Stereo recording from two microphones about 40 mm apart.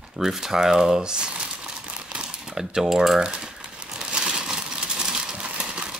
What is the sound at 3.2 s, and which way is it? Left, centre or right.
Speech, centre.